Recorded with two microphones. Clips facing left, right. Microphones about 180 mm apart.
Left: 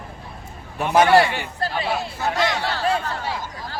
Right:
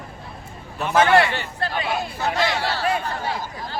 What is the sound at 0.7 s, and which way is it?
Speech, 15° left (ahead or behind).